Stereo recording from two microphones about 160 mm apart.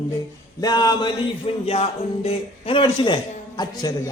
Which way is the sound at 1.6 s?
40° left (ahead or behind).